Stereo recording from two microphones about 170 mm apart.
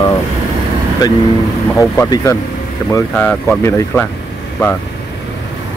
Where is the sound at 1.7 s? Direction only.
20° left (ahead or behind).